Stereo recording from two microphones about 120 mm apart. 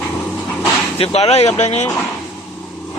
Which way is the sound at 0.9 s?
55° left (ahead or behind).